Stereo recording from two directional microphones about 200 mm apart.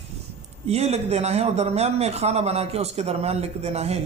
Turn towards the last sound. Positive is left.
turn(degrees=-30)  # may be behind; listen again after turning